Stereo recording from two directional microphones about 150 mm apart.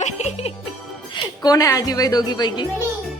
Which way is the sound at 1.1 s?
25° left (ahead or behind).